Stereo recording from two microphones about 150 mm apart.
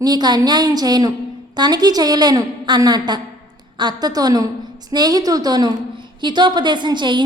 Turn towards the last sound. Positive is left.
turn(degrees=-30)  # may be behind; listen again after turning